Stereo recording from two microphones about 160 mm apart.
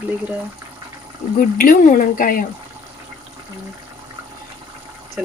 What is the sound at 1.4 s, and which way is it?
Speech, 60° left (ahead or behind).